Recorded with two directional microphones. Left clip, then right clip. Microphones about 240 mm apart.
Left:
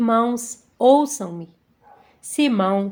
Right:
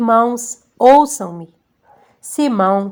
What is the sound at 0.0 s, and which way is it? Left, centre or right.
A woman's voice, centre.